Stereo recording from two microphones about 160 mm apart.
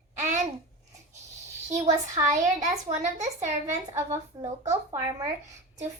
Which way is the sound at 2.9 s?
45° right (ahead or behind).